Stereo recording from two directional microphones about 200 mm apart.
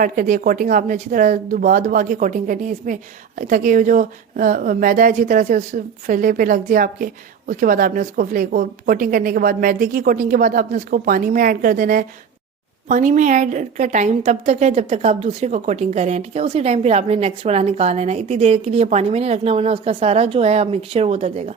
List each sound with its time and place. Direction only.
0.0 s a woman's voice: 40° right (ahead or behind)